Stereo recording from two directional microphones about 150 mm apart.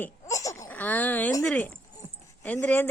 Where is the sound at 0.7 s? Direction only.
10° left (ahead or behind).